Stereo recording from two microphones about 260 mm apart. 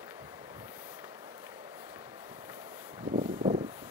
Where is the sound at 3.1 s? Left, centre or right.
Right.